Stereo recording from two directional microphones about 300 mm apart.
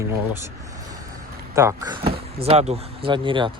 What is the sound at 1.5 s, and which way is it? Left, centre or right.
Speech, centre.